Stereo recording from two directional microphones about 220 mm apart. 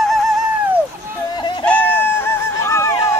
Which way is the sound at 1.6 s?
10° left (ahead or behind).